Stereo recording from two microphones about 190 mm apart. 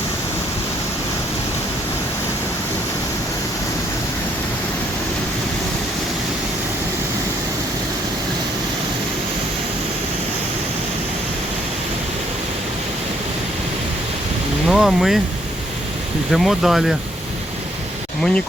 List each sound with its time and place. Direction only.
14.7 s vehicle: centre (ahead or behind)
16.3 s speech: centre (ahead or behind)